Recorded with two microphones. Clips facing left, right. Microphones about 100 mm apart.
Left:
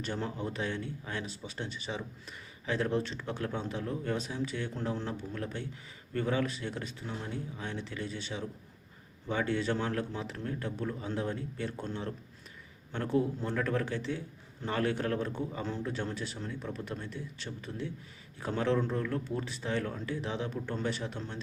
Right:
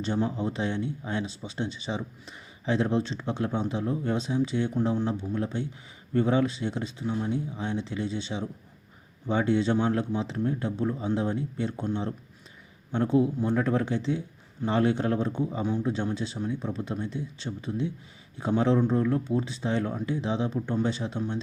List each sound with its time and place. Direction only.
0.0 s a man's voice: 20° right (ahead or behind)